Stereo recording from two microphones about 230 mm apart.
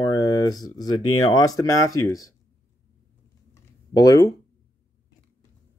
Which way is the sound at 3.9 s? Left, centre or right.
Centre.